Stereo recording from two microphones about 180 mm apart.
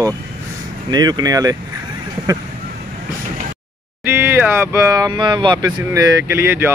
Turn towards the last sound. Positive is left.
turn(degrees=-10)  # may be behind; listen again after turning